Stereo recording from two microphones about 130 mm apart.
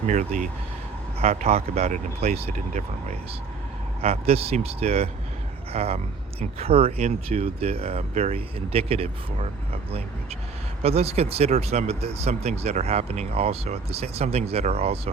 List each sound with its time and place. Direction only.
0.1 s speech: 75° right (ahead or behind)
1.2 s speech: 55° right (ahead or behind)
4.0 s speech: 50° right (ahead or behind)
10.8 s speech: 50° right (ahead or behind)